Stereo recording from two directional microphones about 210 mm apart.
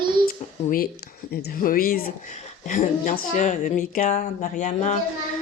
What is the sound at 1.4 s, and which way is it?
A child's voice, 45° left (ahead or behind).